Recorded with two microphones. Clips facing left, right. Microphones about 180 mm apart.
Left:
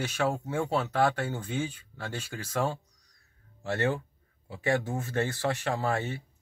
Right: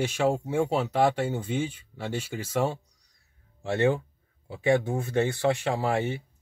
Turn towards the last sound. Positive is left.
turn(degrees=-15)  # may be behind; listen again after turning